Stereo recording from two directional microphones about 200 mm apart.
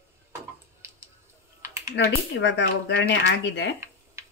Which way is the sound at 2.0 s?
60° left (ahead or behind).